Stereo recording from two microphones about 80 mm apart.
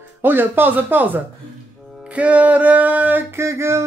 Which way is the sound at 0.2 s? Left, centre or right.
Right.